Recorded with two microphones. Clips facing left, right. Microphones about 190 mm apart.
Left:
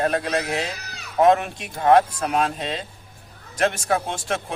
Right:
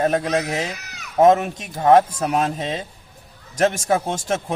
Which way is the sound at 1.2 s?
45° right (ahead or behind).